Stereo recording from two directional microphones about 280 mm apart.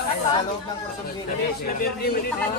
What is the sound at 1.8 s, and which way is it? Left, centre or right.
Speech, left.